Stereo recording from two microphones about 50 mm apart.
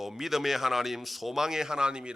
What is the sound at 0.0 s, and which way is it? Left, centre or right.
A man's voice, centre.